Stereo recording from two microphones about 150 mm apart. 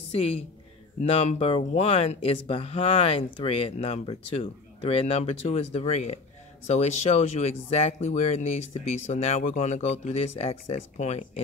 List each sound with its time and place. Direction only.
0.1 s speech: 40° left (ahead or behind)